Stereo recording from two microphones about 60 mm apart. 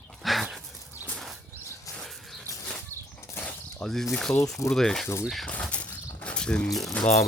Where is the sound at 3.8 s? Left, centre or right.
Centre.